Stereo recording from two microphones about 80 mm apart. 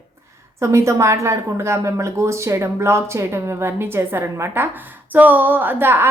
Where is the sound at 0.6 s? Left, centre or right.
Right.